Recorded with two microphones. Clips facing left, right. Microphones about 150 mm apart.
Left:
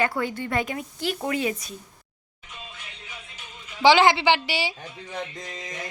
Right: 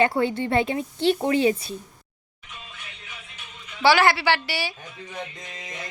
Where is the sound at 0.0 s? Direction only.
25° right (ahead or behind).